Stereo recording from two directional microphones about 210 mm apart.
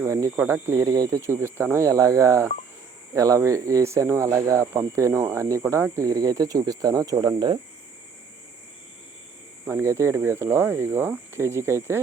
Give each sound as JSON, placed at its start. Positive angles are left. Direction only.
{"t": 0.0, "sound": "speech", "side_deg": -15}
{"t": 9.6, "sound": "speech", "side_deg": -15}